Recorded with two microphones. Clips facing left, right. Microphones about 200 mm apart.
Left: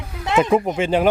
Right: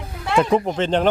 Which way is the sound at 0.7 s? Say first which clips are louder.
Left 1 dB; 10° left (ahead or behind).